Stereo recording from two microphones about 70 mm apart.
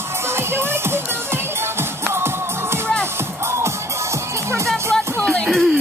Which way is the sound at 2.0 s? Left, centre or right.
Right.